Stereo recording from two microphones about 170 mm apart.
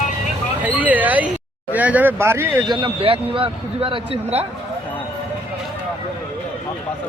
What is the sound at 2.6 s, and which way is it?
A man's voice, 30° right (ahead or behind).